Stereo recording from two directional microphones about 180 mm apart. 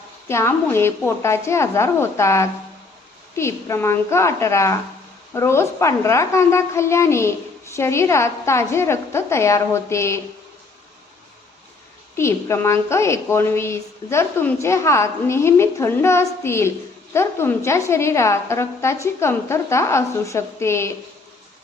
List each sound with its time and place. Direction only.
0.3 s a woman's voice: 15° left (ahead or behind)
12.1 s a woman's voice: 15° left (ahead or behind)